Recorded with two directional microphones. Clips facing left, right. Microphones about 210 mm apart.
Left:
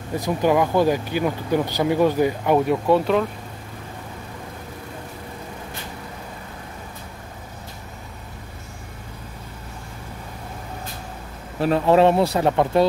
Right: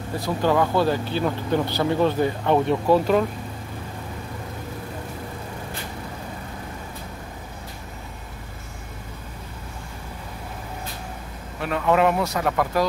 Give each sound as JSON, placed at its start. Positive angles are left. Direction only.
{"t": 0.2, "sound": "speech", "side_deg": 15}
{"t": 11.6, "sound": "speech", "side_deg": 30}